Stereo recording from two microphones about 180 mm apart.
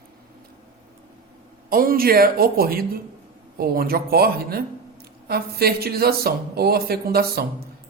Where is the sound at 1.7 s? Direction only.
55° right (ahead or behind).